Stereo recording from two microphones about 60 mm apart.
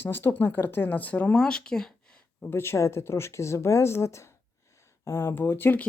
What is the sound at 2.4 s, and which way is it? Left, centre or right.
Speech, left.